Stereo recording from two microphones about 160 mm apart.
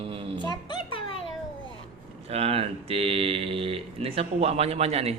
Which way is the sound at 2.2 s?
40° right (ahead or behind).